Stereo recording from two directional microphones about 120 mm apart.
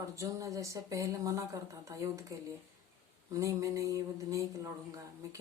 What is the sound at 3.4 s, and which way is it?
Speech, 25° right (ahead or behind).